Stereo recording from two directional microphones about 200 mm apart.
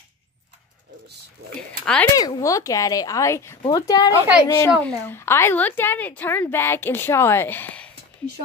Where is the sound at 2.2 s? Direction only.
20° left (ahead or behind).